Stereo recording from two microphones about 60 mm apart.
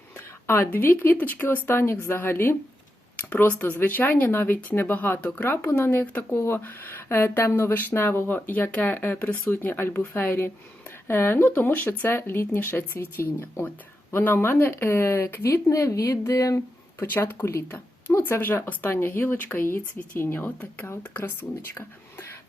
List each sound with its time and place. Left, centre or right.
0.4 s speech: left
1.1 s speech: left
1.4 s speech: left
3.2 s speech: left
5.2 s speech: left
5.5 s speech: left
6.6 s speech: left
12.0 s speech: left
15.4 s speech: left
17.0 s speech: left
18.2 s speech: left
21.8 s speech: left